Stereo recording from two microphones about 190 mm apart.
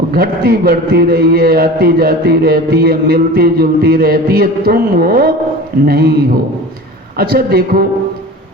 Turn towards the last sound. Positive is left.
turn(degrees=-55)  # may be behind; listen again after turning